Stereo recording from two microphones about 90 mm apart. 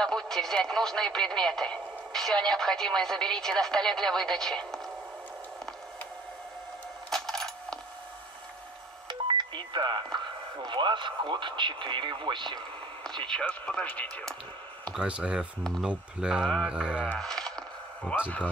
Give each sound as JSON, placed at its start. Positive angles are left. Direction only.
{"t": 0.0, "sound": "speech", "side_deg": 5}
{"t": 7.1, "sound": "coin", "side_deg": 5}
{"t": 9.0, "sound": "telephone dialing", "side_deg": -60}
{"t": 10.1, "sound": "speech", "side_deg": -60}
{"t": 13.3, "sound": "speech", "side_deg": 10}
{"t": 15.0, "sound": "speech", "side_deg": -10}
{"t": 16.6, "sound": "mantra", "side_deg": -10}
{"t": 17.1, "sound": "a sound", "side_deg": 5}
{"t": 18.1, "sound": "a man's voice", "side_deg": 20}